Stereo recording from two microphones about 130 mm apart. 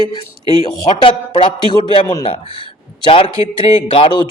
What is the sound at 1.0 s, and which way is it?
A man's voice, 45° left (ahead or behind).